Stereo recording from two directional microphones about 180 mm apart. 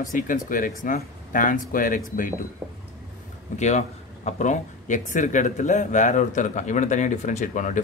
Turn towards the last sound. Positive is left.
turn(degrees=45)  # may be behind; listen again after turning